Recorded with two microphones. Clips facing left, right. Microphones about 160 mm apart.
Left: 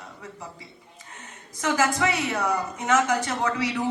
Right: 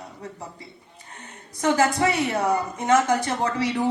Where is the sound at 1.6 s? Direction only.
30° right (ahead or behind).